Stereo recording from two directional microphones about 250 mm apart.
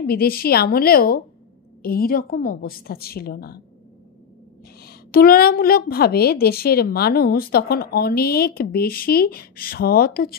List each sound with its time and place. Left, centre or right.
0.0 s a woman's voice: left
4.8 s a woman's voice: left